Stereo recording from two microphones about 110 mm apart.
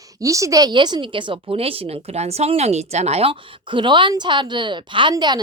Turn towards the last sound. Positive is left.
turn(degrees=-40)  # may be behind; listen again after turning